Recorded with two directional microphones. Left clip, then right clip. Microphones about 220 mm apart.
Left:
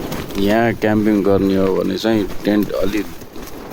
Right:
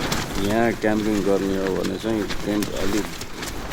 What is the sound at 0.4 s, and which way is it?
Speech, 40° left (ahead or behind).